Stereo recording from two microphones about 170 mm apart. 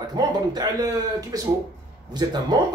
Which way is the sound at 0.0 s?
25° right (ahead or behind).